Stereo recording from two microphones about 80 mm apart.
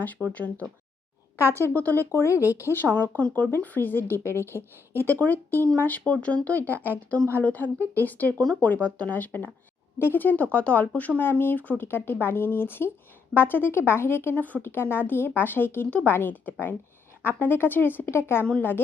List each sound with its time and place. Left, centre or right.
0.0 s speech: left
2.4 s speech: right
2.7 s speech: left
6.7 s speech: right
7.3 s speech: left